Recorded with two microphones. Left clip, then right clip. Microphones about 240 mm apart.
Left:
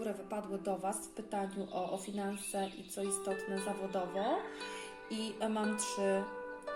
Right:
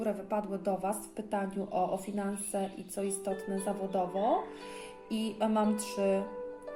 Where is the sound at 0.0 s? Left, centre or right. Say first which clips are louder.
Right 7 dB; right.